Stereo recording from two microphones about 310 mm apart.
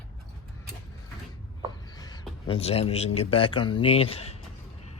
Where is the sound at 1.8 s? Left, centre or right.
Centre.